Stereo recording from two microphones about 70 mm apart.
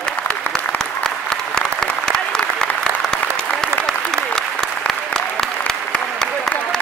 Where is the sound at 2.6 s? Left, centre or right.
Left.